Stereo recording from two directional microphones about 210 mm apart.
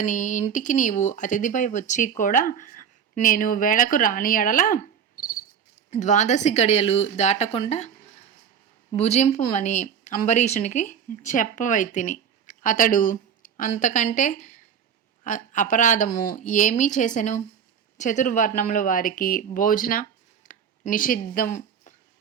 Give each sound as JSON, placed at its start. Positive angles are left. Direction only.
{"t": 0.0, "sound": "speech", "side_deg": 35}
{"t": 8.9, "sound": "speech", "side_deg": 30}